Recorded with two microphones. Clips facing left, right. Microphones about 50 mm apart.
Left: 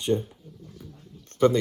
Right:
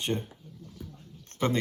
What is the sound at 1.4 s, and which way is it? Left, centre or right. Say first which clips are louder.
Speech: left 8 dB; centre.